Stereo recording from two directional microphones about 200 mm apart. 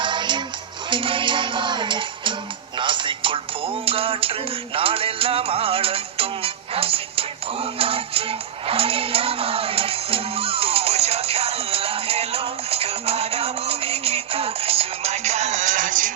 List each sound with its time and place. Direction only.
0.0 s music: 25° right (ahead or behind); by 16.1 s 40° right (ahead or behind)